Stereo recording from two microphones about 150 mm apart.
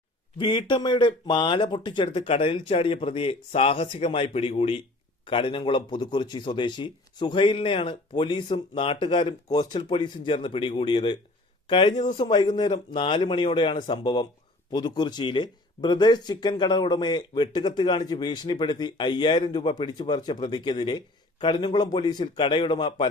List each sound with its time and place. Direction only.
0.3 s speech: 30° left (ahead or behind)